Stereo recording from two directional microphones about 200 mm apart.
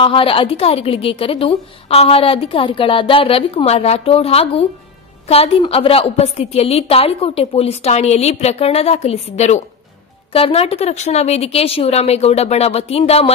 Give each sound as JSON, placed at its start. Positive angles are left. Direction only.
{"t": 0.0, "sound": "a woman's voice", "side_deg": 25}